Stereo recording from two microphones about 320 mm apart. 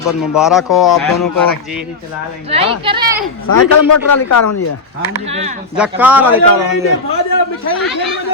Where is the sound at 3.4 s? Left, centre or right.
Left.